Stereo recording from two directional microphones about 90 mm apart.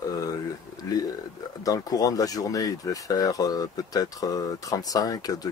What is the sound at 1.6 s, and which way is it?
Speech, 40° left (ahead or behind).